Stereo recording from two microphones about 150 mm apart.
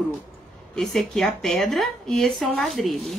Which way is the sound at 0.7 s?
5° left (ahead or behind).